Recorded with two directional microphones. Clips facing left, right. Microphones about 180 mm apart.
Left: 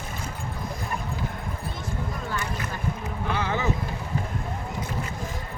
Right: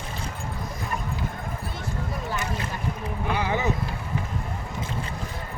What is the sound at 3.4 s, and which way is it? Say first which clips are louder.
Boat: right 1 dB; 15° right (ahead or behind).